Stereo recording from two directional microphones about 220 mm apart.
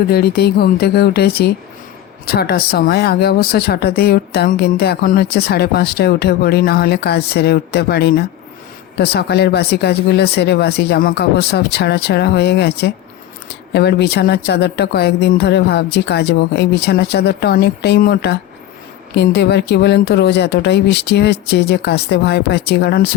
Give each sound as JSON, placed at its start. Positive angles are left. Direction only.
{"t": 0.1, "sound": "speech", "side_deg": 45}